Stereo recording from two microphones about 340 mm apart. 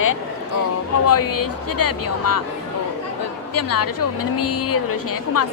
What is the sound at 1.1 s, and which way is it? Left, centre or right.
Speech, left.